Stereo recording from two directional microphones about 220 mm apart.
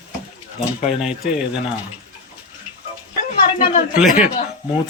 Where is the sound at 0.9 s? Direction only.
5° right (ahead or behind).